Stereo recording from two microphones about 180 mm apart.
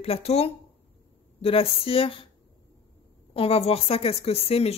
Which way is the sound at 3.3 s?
30° left (ahead or behind).